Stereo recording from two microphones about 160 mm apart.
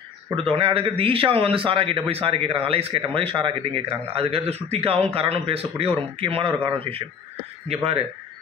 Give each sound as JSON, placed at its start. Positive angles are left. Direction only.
{"t": 0.4, "sound": "a man's voice", "side_deg": -35}